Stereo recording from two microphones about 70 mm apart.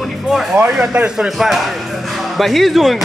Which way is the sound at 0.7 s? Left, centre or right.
Centre.